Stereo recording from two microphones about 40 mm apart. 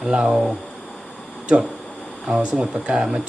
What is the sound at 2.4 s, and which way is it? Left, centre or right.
Speech, right.